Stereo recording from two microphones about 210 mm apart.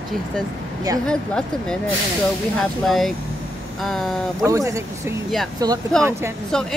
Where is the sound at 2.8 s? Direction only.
Centre (ahead or behind).